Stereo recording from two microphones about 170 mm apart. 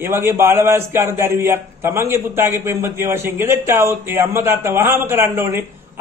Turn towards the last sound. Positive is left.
turn(degrees=-15)  # may be behind; listen again after turning